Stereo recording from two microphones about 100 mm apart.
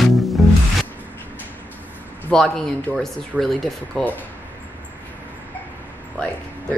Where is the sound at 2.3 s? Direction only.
5° left (ahead or behind).